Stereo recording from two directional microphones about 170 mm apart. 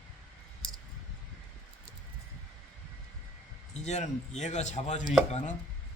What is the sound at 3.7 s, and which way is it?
Speech, 40° left (ahead or behind).